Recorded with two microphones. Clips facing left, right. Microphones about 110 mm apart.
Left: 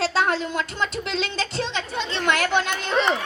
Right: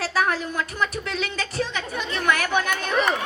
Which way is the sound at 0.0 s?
25° left (ahead or behind).